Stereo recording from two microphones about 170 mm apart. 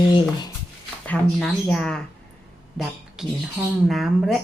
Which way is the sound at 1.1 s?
5° left (ahead or behind).